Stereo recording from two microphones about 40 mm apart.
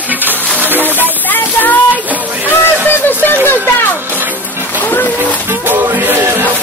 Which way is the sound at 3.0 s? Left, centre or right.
Left.